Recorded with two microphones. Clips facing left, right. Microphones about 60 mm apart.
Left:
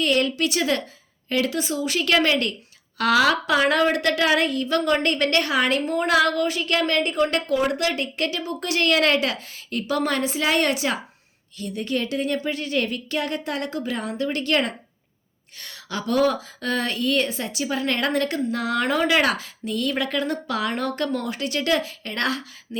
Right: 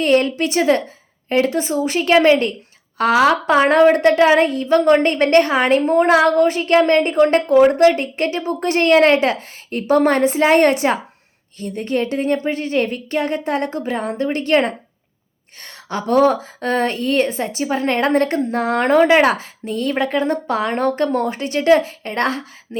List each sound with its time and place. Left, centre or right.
0.0 s a woman's voice: right